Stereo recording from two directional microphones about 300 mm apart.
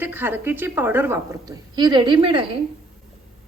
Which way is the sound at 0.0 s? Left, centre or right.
Centre.